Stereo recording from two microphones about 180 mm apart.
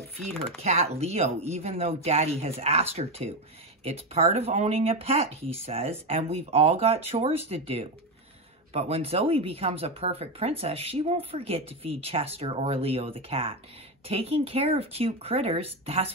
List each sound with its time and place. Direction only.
0.3 s speech: 5° left (ahead or behind)
0.6 s speech: 35° right (ahead or behind)